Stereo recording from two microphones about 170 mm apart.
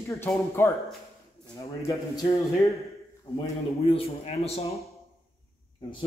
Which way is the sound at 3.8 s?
35° left (ahead or behind).